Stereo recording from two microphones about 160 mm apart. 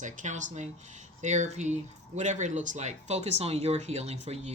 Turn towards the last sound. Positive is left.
turn(degrees=-40)  # may be behind; listen again after turning